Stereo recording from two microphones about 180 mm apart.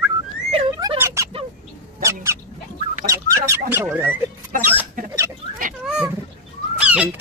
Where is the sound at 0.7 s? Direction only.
20° right (ahead or behind).